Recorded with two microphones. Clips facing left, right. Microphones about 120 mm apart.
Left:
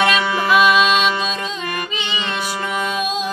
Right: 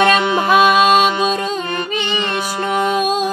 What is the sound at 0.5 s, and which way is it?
Music, 45° right (ahead or behind).